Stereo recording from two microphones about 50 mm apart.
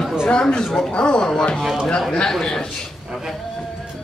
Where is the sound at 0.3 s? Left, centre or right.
Centre.